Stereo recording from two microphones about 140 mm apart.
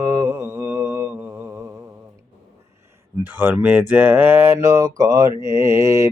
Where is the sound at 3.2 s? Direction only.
15° right (ahead or behind).